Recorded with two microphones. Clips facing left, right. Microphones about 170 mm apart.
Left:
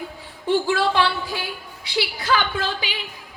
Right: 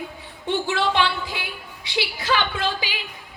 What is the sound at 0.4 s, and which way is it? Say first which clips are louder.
A woman's voice: left 3 dB; 20° right (ahead or behind).